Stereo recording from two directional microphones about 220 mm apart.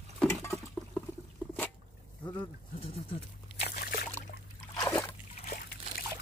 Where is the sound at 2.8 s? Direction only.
25° left (ahead or behind).